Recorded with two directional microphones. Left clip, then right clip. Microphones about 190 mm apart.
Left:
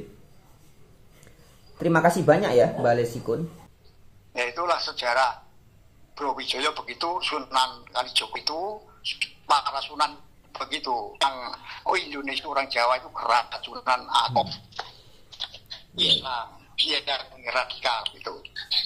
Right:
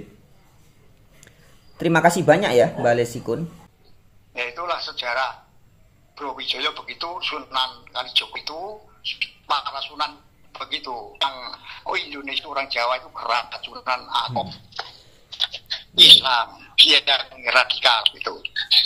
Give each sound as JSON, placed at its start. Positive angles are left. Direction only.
{"t": 1.8, "sound": "speech", "side_deg": -15}
{"t": 4.3, "sound": "a man's voice", "side_deg": 25}
{"t": 14.7, "sound": "a sound", "side_deg": 0}
{"t": 15.2, "sound": "speech", "side_deg": -20}